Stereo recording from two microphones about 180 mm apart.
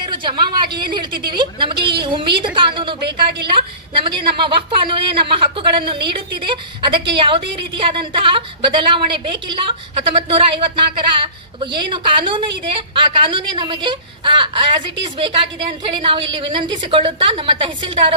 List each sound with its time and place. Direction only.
0.0 s a woman's voice: 25° right (ahead or behind)
3.1 s a woman's voice: 65° right (ahead or behind)
3.5 s a woman's voice: 30° right (ahead or behind)